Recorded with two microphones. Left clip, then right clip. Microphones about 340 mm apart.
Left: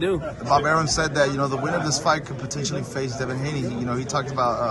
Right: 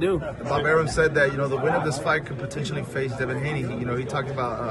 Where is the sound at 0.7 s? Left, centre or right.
Centre.